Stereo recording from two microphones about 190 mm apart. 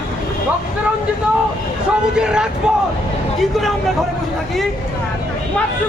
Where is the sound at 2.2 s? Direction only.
5° right (ahead or behind).